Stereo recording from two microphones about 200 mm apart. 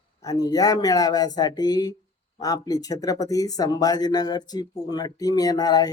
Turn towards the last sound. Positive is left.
turn(degrees=20)  # may be behind; listen again after turning